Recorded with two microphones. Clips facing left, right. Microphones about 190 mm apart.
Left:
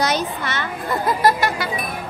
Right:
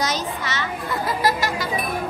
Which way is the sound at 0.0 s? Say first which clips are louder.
Left 4 dB; 60° left (ahead or behind).